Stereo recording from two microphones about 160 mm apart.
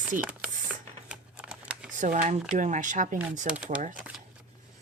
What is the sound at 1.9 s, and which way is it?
Speech, 50° right (ahead or behind).